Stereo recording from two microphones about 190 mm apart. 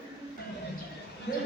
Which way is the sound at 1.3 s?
65° left (ahead or behind).